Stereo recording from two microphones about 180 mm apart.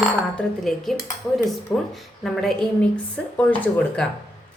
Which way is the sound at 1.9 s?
Centre (ahead or behind).